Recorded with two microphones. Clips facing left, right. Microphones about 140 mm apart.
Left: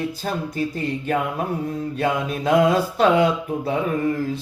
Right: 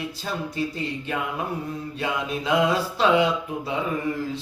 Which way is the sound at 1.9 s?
50° left (ahead or behind).